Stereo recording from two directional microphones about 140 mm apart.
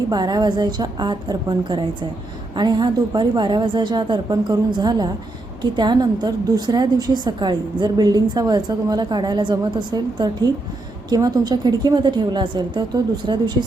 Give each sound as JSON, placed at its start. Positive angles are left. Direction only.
{"t": 0.1, "sound": "a woman's voice", "side_deg": -30}